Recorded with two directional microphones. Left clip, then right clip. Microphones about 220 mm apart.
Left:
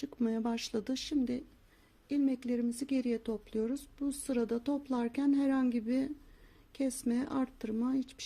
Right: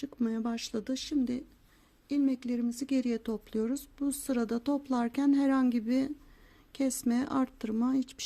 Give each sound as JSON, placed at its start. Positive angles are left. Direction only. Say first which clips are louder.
{"t": 0.0, "sound": "speech", "louder": "right 1 dB", "side_deg": -5}